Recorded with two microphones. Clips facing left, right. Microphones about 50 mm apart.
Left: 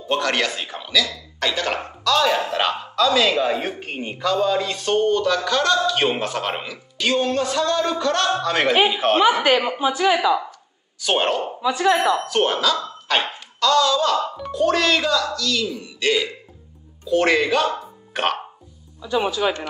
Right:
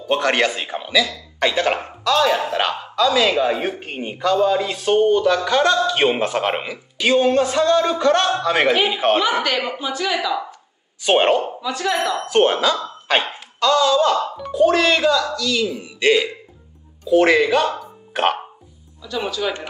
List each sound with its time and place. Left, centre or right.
0.1 s speech: right
1.8 s speech: centre
9.4 s a woman's voice: centre
11.0 s speech: right
11.6 s speech: centre
12.3 s speech: centre
17.1 s speech: centre
18.9 s speech: centre